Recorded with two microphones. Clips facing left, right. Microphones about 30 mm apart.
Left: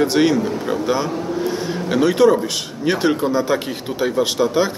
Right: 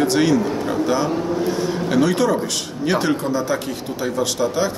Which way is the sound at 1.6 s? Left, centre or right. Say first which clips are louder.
Left 1 dB; centre.